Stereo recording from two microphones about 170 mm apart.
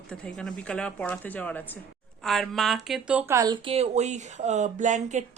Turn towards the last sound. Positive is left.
turn(degrees=-45)  # may be behind; listen again after turning